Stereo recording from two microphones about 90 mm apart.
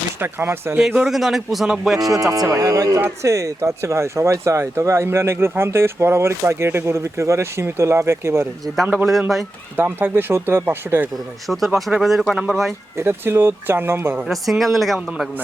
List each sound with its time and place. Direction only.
0.2 s speech: 25° right (ahead or behind)
0.8 s speech: 5° right (ahead or behind)
2.0 s speech: 45° right (ahead or behind)
9.7 s speech: 20° right (ahead or behind)
11.4 s speech: centre (ahead or behind)
13.0 s speech: 30° right (ahead or behind)
14.3 s speech: centre (ahead or behind)